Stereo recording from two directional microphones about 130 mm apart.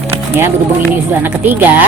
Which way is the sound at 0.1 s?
20° right (ahead or behind).